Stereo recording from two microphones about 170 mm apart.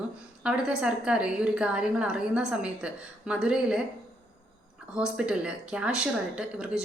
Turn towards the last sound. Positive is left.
turn(degrees=-5)  # may be behind; listen again after turning